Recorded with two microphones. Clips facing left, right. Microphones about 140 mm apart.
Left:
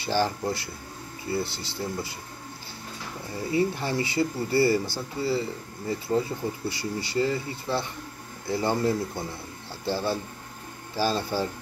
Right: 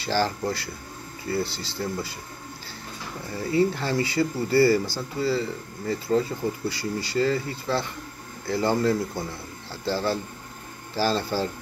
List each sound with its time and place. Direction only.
0.0 s speech: 20° left (ahead or behind)
3.3 s speech: 20° left (ahead or behind)
8.5 s speech: 20° left (ahead or behind)